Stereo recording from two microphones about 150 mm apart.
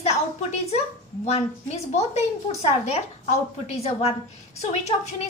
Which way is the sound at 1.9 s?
45° left (ahead or behind).